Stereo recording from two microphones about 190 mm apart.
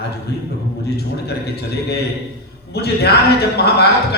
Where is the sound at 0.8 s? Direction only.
60° left (ahead or behind).